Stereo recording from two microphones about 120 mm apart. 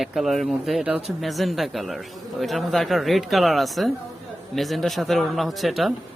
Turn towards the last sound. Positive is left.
turn(degrees=0)  # may be behind; listen again after turning